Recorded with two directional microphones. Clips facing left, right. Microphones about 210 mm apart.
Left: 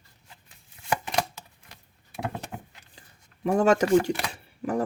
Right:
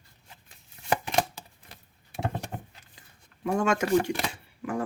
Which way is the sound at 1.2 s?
30° right (ahead or behind).